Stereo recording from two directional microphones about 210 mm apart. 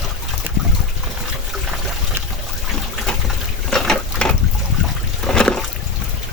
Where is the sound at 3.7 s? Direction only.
5° left (ahead or behind).